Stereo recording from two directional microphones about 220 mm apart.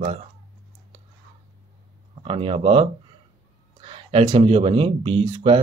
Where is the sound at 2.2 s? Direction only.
25° right (ahead or behind).